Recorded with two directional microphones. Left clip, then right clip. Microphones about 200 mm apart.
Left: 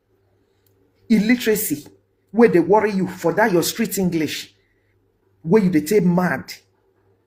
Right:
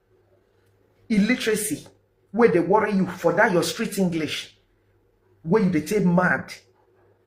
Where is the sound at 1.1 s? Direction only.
45° left (ahead or behind).